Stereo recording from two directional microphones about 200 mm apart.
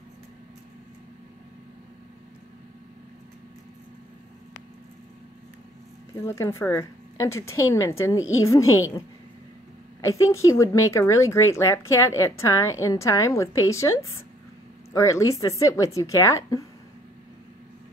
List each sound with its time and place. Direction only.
6.2 s a woman's voice: 15° left (ahead or behind)
8.6 s a woman's voice: 90° left
10.3 s a woman's voice: 15° left (ahead or behind)